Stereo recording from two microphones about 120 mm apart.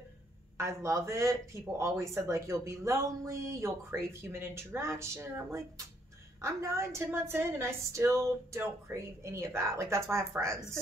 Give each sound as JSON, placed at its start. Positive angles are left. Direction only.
{"t": 0.6, "sound": "speech", "side_deg": -25}